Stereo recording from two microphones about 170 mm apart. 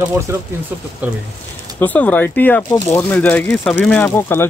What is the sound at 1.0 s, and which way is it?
Speech, 10° right (ahead or behind).